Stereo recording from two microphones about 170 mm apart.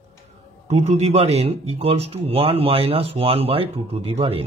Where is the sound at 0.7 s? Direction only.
40° right (ahead or behind).